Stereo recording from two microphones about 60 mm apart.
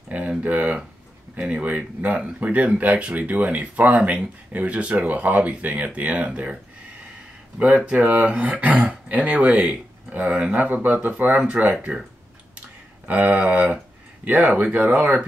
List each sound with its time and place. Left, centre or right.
0.1 s a sound: right
1.3 s speech: right
11.7 s speech: centre
13.0 s speech: right